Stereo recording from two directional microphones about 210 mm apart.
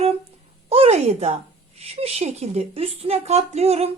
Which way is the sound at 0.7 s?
30° right (ahead or behind).